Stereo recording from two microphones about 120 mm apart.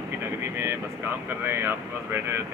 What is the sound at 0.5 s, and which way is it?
Speech, 20° right (ahead or behind).